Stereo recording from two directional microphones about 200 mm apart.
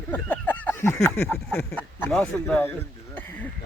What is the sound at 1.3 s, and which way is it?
Speech, 5° left (ahead or behind).